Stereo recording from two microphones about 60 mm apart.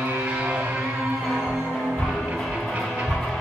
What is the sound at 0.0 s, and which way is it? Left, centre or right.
Music, right.